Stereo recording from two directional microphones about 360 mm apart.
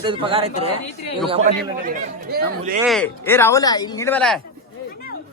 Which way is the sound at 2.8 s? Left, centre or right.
Centre.